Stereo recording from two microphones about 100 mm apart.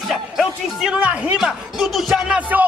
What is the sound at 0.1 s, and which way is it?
Music, centre (ahead or behind).